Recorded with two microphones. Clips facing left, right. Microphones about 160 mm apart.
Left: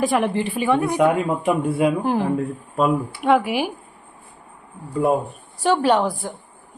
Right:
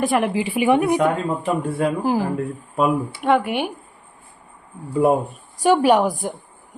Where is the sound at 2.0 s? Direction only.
Centre (ahead or behind).